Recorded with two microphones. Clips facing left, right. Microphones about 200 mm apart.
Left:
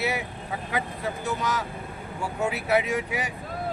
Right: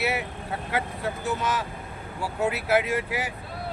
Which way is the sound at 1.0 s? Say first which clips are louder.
Right 1 dB; centre (ahead or behind).